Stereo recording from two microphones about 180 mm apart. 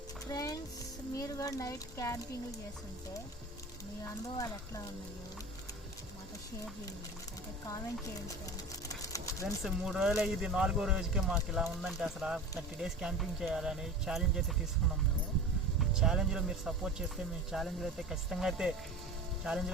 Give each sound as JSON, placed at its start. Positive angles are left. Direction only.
{"t": 0.3, "sound": "music", "side_deg": 20}
{"t": 1.1, "sound": "speech", "side_deg": 20}
{"t": 4.4, "sound": "speech", "side_deg": 20}
{"t": 9.0, "sound": "a sound", "side_deg": 15}
{"t": 9.6, "sound": "speech", "side_deg": -5}
{"t": 15.8, "sound": "speech", "side_deg": -5}